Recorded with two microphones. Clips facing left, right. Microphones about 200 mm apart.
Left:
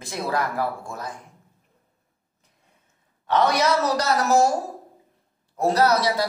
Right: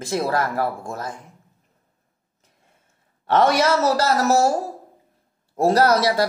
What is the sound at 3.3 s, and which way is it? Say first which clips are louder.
Speech: right 3 dB; 50° right (ahead or behind).